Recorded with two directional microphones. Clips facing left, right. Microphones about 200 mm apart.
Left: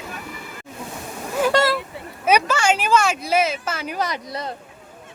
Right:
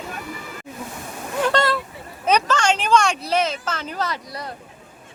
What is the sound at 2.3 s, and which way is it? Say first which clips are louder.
Speech: left 1 dB; 10° left (ahead or behind).